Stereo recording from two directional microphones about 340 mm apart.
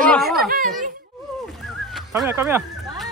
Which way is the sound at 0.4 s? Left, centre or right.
Right.